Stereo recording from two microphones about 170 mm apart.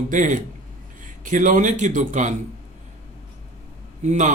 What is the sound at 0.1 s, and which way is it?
Speech, 50° right (ahead or behind).